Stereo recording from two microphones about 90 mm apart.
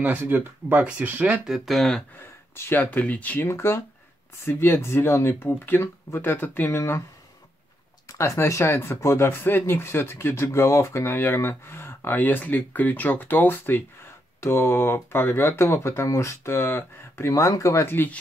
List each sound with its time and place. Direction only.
0.0 s speech: 20° right (ahead or behind)
1.4 s speech: centre (ahead or behind)
2.1 s speech: 20° left (ahead or behind)
8.1 s speech: 35° left (ahead or behind)
17.3 s speech: 40° left (ahead or behind)